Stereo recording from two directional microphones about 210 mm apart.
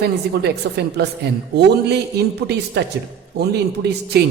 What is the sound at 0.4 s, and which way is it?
A woman's voice, 50° right (ahead or behind).